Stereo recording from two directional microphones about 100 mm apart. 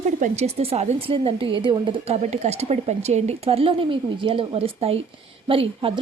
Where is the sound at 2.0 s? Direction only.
90° right.